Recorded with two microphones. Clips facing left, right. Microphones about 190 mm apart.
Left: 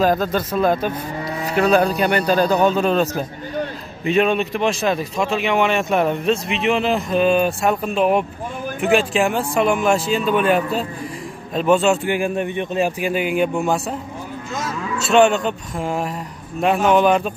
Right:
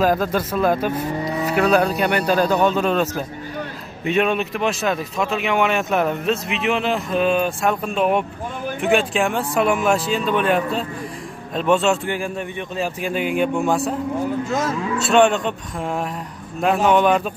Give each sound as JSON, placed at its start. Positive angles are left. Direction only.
{"t": 0.0, "sound": "speech", "side_deg": -5}
{"t": 12.2, "sound": "speech", "side_deg": 20}
{"t": 13.0, "sound": "speech", "side_deg": 5}
{"t": 15.0, "sound": "speech", "side_deg": 0}